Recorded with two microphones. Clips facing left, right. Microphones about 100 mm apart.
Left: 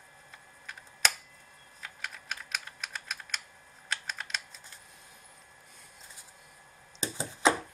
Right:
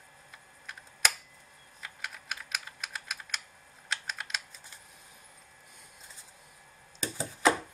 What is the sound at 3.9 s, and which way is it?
Typing, centre (ahead or behind).